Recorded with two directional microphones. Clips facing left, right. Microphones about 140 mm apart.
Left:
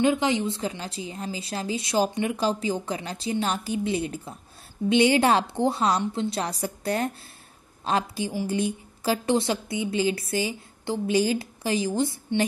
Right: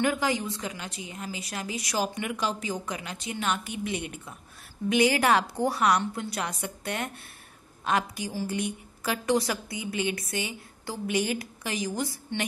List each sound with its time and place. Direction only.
0.0 s a woman's voice: 20° left (ahead or behind)